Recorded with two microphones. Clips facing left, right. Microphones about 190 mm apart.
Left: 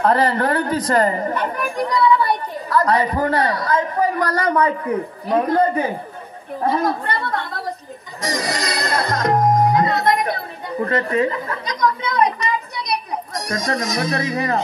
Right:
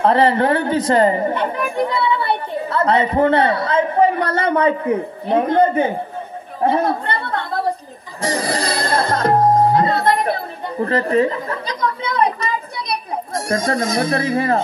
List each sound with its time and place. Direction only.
0.0 s speech: 25° right (ahead or behind)
6.6 s a sound: 30° right (ahead or behind)
8.2 s music: 30° right (ahead or behind)